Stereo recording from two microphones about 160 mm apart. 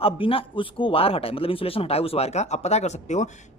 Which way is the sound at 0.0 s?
35° left (ahead or behind).